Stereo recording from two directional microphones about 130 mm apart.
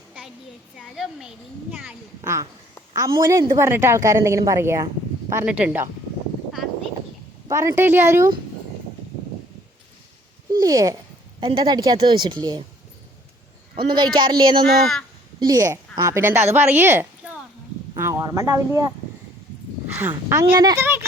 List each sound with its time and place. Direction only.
0.8 s speech: centre (ahead or behind)
2.2 s a woman's voice: 20° right (ahead or behind)
5.5 s speech: 10° right (ahead or behind)
7.4 s a woman's voice: 25° right (ahead or behind)
10.6 s a woman's voice: 30° right (ahead or behind)
11.3 s a woman's voice: 40° right (ahead or behind)
13.8 s a woman's voice: 35° right (ahead or behind)
14.7 s speech: centre (ahead or behind)
15.4 s a woman's voice: 30° right (ahead or behind)
20.0 s speech: 15° right (ahead or behind)
20.6 s a woman's voice: 30° right (ahead or behind)
20.8 s speech: 20° right (ahead or behind)